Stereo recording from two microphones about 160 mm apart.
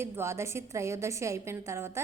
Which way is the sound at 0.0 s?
15° right (ahead or behind).